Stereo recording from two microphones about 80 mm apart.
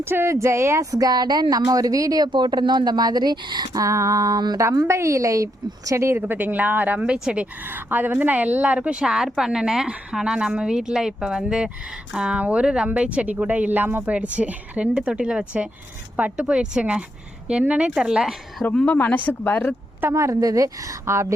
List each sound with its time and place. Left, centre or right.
0.0 s speech: right
2.3 s speech: right
4.4 s speech: right
4.6 s a woman's voice: right; by 18.3 s centre
18.7 s speech: centre
18.9 s speech: left
20.0 s a woman's voice: right